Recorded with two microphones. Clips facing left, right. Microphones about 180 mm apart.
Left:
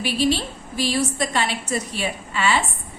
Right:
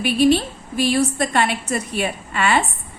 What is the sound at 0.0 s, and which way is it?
A woman's voice, 55° right (ahead or behind).